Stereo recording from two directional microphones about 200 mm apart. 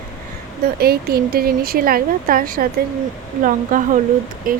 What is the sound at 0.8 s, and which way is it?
Speech, 50° right (ahead or behind).